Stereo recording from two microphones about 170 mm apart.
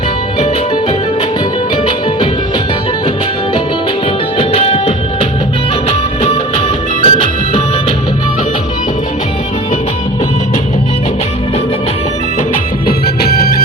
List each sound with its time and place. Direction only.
4.4 s music: 35° left (ahead or behind)
7.0 s music: 35° left (ahead or behind)
13.2 s music: 65° left (ahead or behind)